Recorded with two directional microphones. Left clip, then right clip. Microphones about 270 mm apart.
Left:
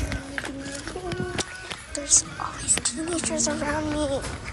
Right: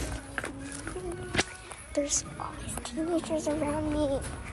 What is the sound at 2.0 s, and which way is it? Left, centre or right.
Speech, right.